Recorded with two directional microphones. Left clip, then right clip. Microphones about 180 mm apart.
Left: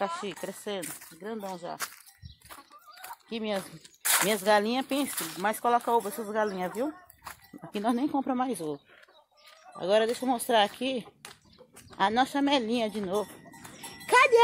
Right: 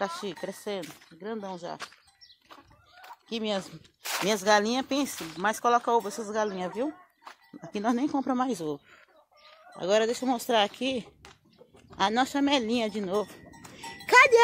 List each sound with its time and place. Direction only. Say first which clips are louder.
0.0 s speech: even; 20° right (ahead or behind)
3.3 s speech: right 2 dB; 20° right (ahead or behind)
4.0 s a sound: left 4 dB; 10° left (ahead or behind)
4.3 s speech: right 3 dB; 15° right (ahead or behind)
9.8 s speech: even; 15° right (ahead or behind)